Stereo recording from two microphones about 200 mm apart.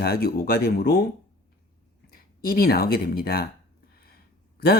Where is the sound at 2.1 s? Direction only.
50° left (ahead or behind).